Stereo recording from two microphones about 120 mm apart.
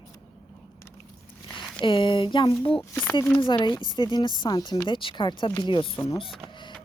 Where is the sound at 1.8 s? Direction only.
45° left (ahead or behind).